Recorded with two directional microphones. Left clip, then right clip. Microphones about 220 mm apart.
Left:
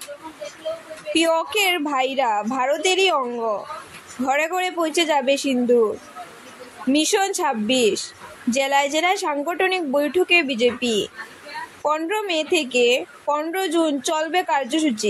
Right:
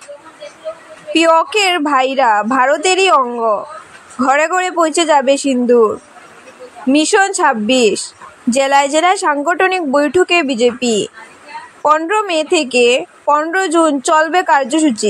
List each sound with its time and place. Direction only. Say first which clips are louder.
1.1 s a woman's voice: right 9 dB; 20° right (ahead or behind)
6.9 s a woman's voice: right 8 dB; 25° right (ahead or behind)